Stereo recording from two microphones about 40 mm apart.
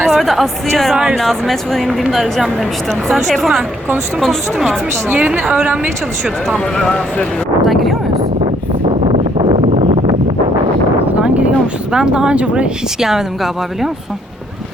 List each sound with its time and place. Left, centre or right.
0.1 s a woman's voice: centre
1.9 s speech: centre
5.0 s a woman's voice: right
6.7 s speech: left
7.6 s a sound: centre
11.2 s a sound: right
11.9 s speech: right
13.0 s speech: centre